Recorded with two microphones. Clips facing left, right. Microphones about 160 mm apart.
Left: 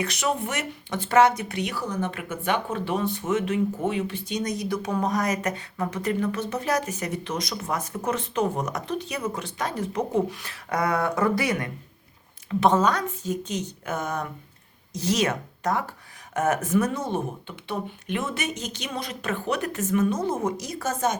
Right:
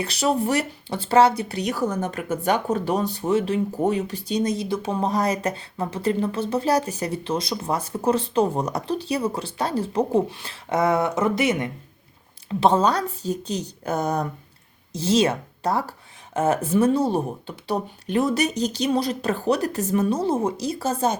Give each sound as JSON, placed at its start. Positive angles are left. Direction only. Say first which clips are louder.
{"t": 0.0, "sound": "speech", "louder": "right 4 dB", "side_deg": -35}